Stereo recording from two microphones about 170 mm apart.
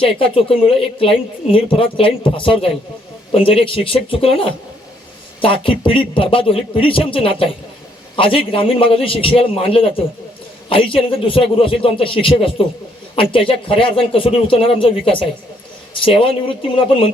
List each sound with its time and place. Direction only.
0.0 s a woman's voice: 30° left (ahead or behind)
5.6 s a woman's voice: 30° left (ahead or behind)